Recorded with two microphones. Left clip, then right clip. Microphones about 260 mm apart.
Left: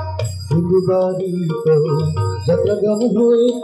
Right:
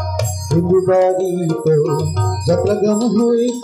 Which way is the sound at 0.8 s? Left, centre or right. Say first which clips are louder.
Right 4 dB; right.